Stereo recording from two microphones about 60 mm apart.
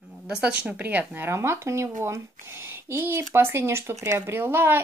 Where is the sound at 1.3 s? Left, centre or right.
Right.